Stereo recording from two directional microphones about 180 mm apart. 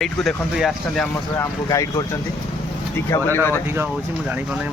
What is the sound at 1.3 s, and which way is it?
Speech, 20° left (ahead or behind).